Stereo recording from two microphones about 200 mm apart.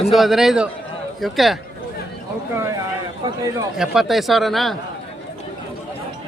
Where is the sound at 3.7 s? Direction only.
Centre (ahead or behind).